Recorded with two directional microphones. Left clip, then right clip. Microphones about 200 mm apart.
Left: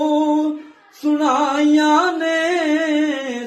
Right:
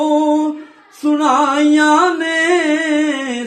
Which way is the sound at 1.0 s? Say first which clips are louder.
Right 4 dB; 35° right (ahead or behind).